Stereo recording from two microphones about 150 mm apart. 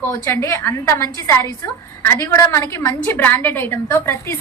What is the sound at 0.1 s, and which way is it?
A woman's voice, 15° left (ahead or behind).